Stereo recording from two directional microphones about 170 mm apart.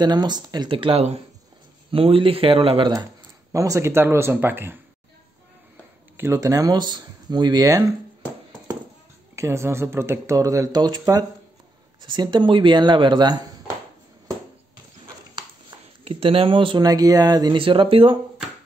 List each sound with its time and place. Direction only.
0.0 s speech: 25° right (ahead or behind)
3.5 s speech: 20° right (ahead or behind)
6.1 s speech: 15° right (ahead or behind)
9.3 s speech: 15° right (ahead or behind)
16.0 s speech: 35° right (ahead or behind)